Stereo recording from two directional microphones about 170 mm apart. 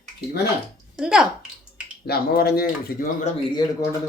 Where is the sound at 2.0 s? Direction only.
65° left (ahead or behind).